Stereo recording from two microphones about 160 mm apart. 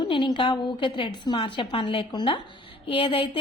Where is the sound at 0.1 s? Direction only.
30° left (ahead or behind).